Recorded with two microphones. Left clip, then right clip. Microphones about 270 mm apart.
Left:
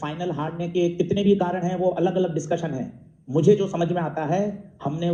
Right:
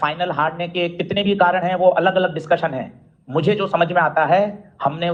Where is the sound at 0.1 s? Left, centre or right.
Right.